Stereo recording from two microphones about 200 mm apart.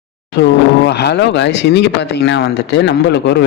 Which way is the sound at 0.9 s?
55° left (ahead or behind).